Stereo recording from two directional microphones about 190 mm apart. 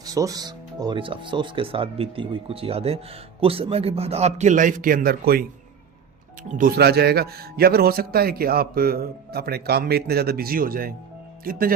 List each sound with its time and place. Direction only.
0.0 s a man's voice: 20° right (ahead or behind); by 5.5 s 50° right (ahead or behind)
6.5 s a man's voice: 50° right (ahead or behind)